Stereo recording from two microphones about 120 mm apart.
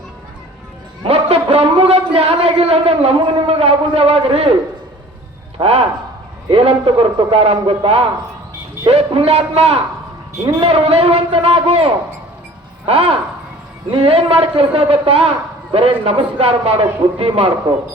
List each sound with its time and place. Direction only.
1.0 s speech: 55° right (ahead or behind)
5.5 s a man's voice: 55° right (ahead or behind)